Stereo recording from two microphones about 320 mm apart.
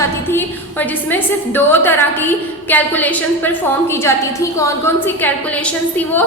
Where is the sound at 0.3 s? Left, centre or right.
Centre.